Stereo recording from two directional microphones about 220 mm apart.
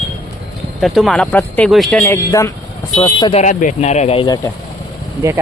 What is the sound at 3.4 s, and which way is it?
Speech, 35° left (ahead or behind).